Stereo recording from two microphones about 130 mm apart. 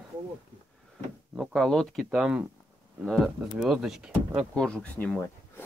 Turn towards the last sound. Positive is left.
turn(degrees=10)  # may be behind; listen again after turning